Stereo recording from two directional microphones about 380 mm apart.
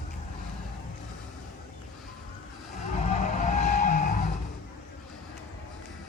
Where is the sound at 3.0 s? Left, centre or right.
Centre.